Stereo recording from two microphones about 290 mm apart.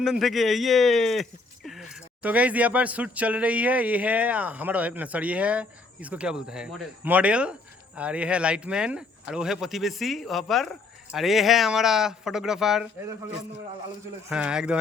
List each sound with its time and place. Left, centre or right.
0.0 s speech: centre
14.3 s speech: centre